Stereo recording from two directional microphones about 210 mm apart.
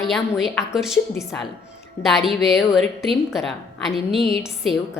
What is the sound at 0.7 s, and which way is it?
Speech, centre (ahead or behind).